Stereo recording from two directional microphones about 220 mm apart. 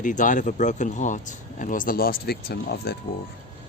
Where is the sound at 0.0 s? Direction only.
35° left (ahead or behind).